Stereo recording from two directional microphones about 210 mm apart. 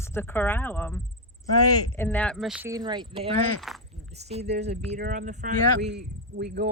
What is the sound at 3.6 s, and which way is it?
Speech, centre (ahead or behind).